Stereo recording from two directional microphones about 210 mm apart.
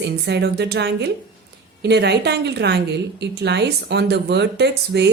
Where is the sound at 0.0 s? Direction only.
55° right (ahead or behind).